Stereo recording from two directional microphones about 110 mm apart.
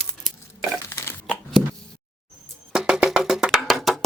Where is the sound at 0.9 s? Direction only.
20° left (ahead or behind).